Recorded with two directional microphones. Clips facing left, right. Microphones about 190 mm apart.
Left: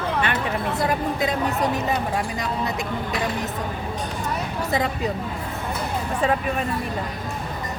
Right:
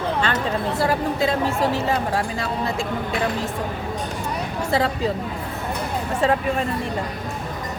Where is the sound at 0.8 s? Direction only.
30° right (ahead or behind).